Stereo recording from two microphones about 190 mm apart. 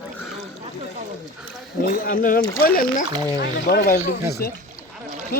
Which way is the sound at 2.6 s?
50° left (ahead or behind).